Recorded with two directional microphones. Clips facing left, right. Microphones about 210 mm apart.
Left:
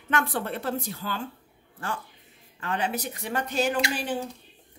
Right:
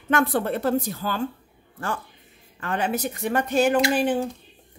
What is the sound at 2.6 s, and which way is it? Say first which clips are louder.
A woman's voice: right 4 dB; 50° right (ahead or behind).